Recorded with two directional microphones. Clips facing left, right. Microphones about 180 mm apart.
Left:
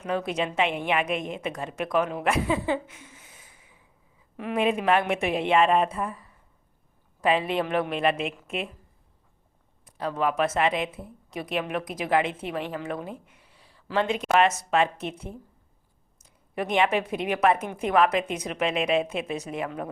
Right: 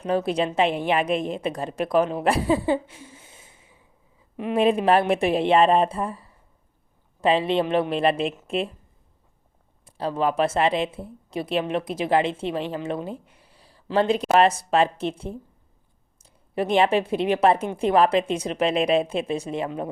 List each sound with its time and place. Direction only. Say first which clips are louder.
0.0 s a woman's voice: right 5 dB; 35° right (ahead or behind)
9.8 s a woman's voice: right 3 dB; 30° right (ahead or behind)